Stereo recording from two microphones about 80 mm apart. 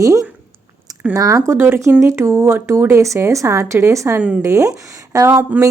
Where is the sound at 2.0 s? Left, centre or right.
Right.